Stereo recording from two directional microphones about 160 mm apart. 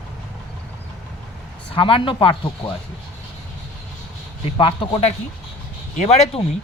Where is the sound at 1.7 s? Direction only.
35° left (ahead or behind).